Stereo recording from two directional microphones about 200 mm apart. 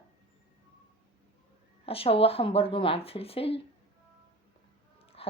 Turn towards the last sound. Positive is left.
turn(degrees=30)  # may be behind; listen again after turning